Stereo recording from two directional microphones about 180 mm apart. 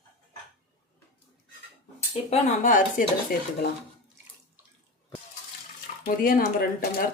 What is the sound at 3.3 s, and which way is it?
Speech, 55° left (ahead or behind).